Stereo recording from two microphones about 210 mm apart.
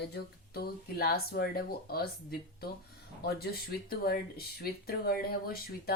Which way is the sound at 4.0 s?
45° left (ahead or behind).